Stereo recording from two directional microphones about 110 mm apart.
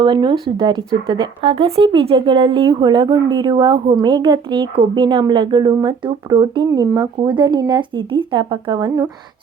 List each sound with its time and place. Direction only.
0.0 s a woman's voice: 45° right (ahead or behind)
1.5 s a woman's voice: 60° right (ahead or behind); by 9.0 s 40° right (ahead or behind)